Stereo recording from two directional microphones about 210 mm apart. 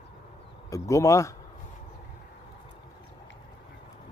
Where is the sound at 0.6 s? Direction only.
15° left (ahead or behind).